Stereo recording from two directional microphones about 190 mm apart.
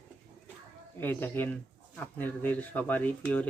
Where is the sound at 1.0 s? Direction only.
10° left (ahead or behind).